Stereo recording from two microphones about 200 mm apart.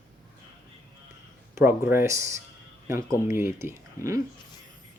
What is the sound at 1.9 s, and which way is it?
Speech, 15° right (ahead or behind).